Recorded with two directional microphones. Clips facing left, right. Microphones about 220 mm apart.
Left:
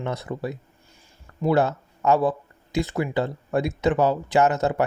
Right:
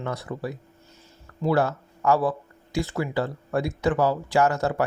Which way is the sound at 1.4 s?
20° left (ahead or behind).